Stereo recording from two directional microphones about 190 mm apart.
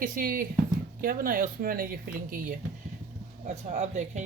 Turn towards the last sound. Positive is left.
turn(degrees=-40)  # may be behind; listen again after turning